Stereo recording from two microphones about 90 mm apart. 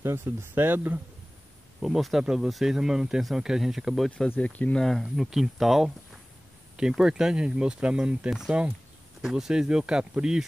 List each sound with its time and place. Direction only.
0.0 s speech: 25° right (ahead or behind)
1.8 s speech: centre (ahead or behind)
4.3 s speech: 15° left (ahead or behind)
4.8 s speech: centre (ahead or behind)